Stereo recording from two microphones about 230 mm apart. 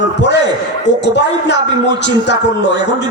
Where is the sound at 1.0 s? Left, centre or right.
Left.